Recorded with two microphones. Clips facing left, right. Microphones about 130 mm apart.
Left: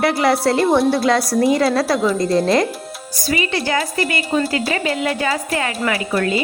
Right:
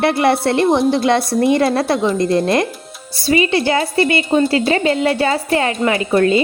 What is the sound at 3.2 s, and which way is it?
A woman's voice, 25° right (ahead or behind).